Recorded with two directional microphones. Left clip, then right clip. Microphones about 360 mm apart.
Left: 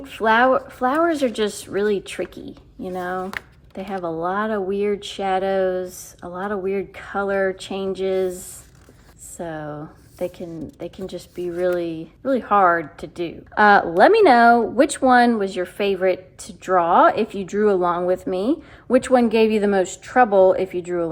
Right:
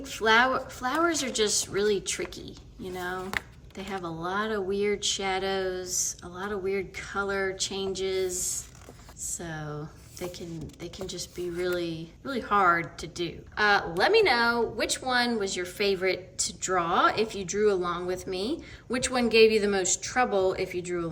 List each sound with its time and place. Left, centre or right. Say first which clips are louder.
0.0 s speech: left 6 dB; centre
9.4 s speech: left 11 dB; centre